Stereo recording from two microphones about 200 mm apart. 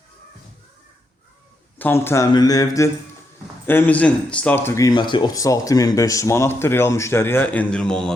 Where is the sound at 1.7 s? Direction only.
10° left (ahead or behind).